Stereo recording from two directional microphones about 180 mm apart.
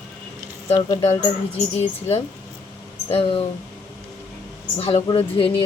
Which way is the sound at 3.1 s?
30° left (ahead or behind).